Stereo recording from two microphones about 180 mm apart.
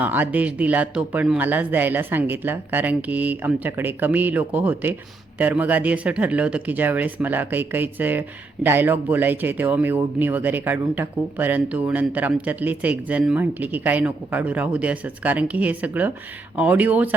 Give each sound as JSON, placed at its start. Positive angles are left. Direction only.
{"t": 0.0, "sound": "speech", "side_deg": -10}